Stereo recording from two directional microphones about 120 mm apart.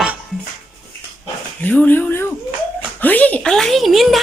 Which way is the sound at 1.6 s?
15° left (ahead or behind).